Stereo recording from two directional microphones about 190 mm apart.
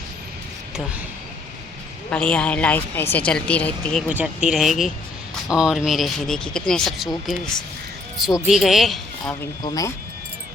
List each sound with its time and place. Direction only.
2.0 s a woman's voice: 5° left (ahead or behind)
4.1 s speech: 5° right (ahead or behind)
8.4 s speech: centre (ahead or behind)
9.3 s a woman's voice: 15° left (ahead or behind)